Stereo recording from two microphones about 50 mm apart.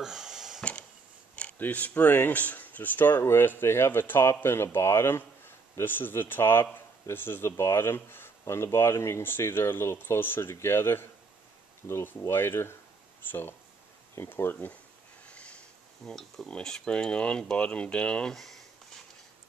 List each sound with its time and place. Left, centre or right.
0.0 s a sound: centre
1.6 s speech: left
7.4 s speech: left
8.5 s speech: left
9.2 s speech: left
10.5 s speech: left
15.2 s sniff: left
16.0 s speech: centre
16.9 s speech: left
18.3 s speech: centre